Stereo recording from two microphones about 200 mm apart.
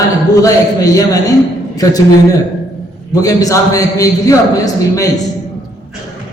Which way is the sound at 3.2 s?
15° left (ahead or behind).